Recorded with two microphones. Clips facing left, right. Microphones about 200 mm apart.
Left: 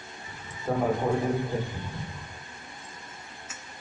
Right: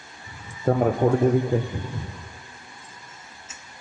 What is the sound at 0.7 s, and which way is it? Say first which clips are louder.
Speech: right 6 dB; 60° right (ahead or behind).